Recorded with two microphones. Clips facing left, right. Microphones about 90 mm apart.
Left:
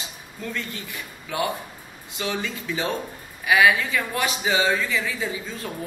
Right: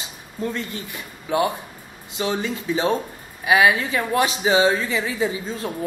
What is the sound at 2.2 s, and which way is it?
A man's voice, 30° right (ahead or behind).